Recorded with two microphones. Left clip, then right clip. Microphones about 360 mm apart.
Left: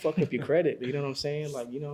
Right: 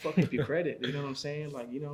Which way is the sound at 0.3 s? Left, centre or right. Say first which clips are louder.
Left 5 dB; left.